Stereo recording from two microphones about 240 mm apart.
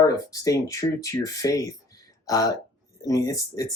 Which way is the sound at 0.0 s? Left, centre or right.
Centre.